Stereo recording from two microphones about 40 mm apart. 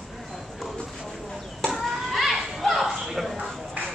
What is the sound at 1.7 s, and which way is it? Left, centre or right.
Children playing, centre.